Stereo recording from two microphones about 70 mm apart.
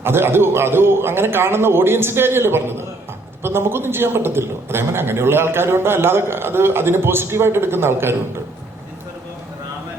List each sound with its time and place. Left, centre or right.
0.0 s a man's voice: right